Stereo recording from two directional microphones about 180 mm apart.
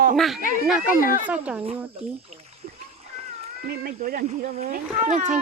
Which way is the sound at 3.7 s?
55° right (ahead or behind).